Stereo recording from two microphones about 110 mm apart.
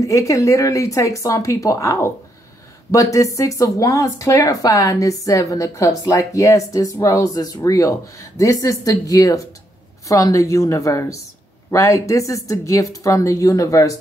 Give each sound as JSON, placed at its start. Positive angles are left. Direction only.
{"t": 0.0, "sound": "speech", "side_deg": 30}